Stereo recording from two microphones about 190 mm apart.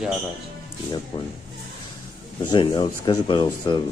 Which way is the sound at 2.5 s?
25° left (ahead or behind).